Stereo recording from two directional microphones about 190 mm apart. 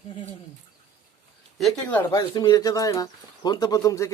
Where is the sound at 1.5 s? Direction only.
Centre (ahead or behind).